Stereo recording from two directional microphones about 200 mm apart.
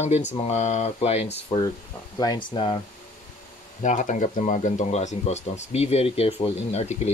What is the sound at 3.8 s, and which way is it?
Speech, 40° left (ahead or behind).